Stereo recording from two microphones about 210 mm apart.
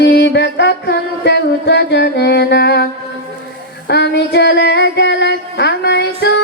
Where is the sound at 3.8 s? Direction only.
55° left (ahead or behind).